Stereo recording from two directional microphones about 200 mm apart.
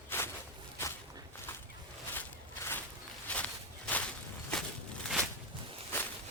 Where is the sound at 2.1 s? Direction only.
10° left (ahead or behind).